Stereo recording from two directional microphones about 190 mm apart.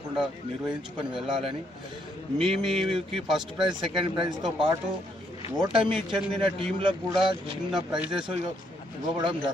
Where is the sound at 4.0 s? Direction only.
25° right (ahead or behind).